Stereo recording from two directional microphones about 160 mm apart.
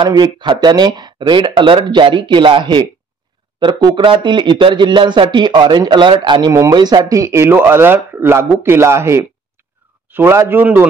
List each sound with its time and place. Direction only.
0.0 s speech: 30° right (ahead or behind); by 10.9 s 10° right (ahead or behind)